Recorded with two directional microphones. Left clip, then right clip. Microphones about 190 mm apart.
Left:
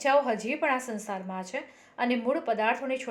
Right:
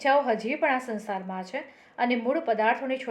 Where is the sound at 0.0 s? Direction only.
35° left (ahead or behind).